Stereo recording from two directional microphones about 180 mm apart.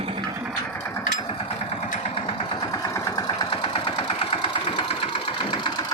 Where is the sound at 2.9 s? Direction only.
20° left (ahead or behind).